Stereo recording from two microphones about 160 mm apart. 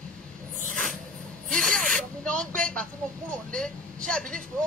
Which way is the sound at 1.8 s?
55° right (ahead or behind).